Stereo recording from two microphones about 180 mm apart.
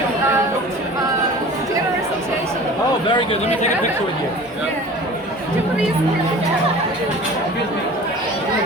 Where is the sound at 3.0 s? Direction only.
30° left (ahead or behind).